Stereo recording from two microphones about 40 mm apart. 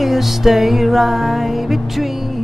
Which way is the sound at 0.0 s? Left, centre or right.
Centre.